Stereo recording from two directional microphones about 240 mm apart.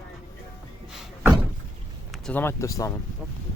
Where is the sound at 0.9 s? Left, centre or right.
Centre.